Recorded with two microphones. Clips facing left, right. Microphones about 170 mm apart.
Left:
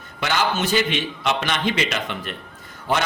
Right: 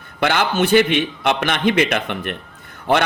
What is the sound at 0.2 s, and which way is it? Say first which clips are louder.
A man's voice: right 5 dB; 60° right (ahead or behind).